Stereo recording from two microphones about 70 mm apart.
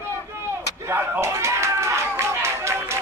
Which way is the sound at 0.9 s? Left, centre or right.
Right.